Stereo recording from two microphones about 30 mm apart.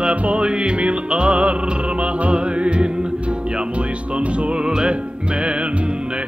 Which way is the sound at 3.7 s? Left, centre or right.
Right.